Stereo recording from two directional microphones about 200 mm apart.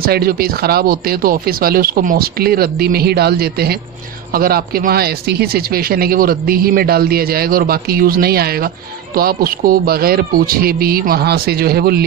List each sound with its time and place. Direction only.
0.0 s speech: 50° right (ahead or behind)